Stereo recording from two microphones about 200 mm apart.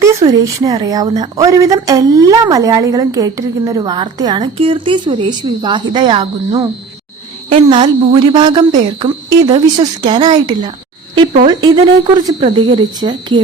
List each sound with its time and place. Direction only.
0.0 s a woman's voice: 15° right (ahead or behind)